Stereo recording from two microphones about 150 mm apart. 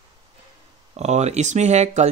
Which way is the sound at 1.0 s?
50° right (ahead or behind).